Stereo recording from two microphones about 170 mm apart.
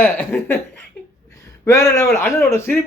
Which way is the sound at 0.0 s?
10° left (ahead or behind).